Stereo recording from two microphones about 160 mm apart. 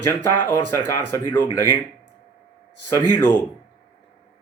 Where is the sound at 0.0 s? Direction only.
15° left (ahead or behind).